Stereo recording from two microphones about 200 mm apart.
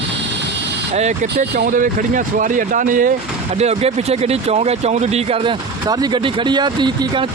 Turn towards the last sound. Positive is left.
turn(degrees=-20)  # may be behind; listen again after turning